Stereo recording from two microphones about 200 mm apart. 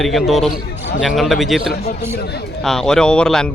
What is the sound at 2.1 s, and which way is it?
Speech, 55° left (ahead or behind).